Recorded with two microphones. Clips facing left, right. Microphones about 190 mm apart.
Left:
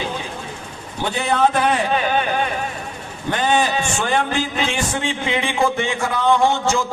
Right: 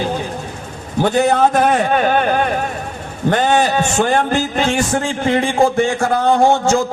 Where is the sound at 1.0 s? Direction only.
45° right (ahead or behind).